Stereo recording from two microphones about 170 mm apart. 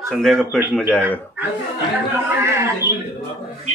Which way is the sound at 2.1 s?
15° right (ahead or behind).